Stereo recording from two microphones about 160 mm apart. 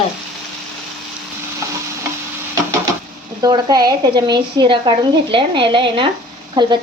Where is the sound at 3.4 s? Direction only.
25° right (ahead or behind).